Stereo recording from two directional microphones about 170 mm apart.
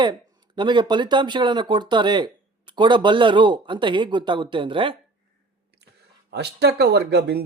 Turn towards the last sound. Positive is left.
turn(degrees=-75)  # may be behind; listen again after turning